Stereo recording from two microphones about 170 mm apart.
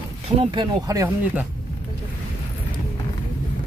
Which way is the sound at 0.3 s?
30° right (ahead or behind).